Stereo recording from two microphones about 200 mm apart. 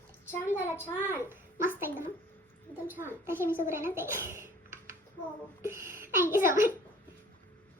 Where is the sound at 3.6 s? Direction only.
10° right (ahead or behind).